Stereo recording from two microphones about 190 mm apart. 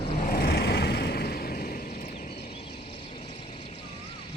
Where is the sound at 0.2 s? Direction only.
50° left (ahead or behind).